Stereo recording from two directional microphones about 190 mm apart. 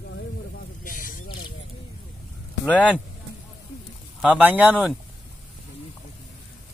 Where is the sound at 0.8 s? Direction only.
45° left (ahead or behind).